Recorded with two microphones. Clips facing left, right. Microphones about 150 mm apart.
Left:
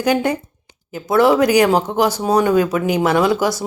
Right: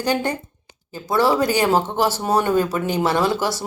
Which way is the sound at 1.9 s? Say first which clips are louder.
Left 3 dB; centre (ahead or behind).